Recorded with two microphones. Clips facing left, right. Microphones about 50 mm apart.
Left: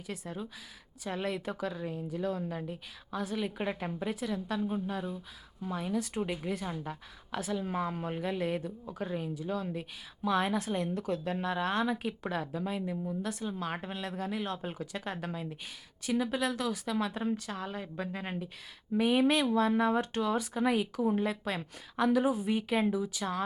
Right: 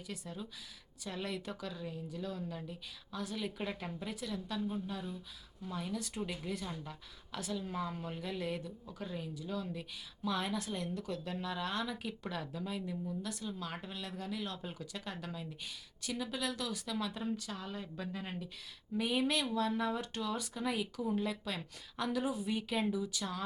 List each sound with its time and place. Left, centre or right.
0.1 s a woman's voice: left
20.5 s speech: left
21.6 s a woman's voice: left